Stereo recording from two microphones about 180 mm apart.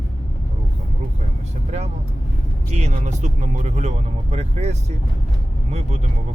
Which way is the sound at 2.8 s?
40° right (ahead or behind).